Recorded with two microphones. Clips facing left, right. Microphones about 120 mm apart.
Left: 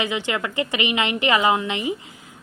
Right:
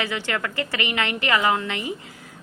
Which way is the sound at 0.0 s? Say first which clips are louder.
Left 2 dB; 20° left (ahead or behind).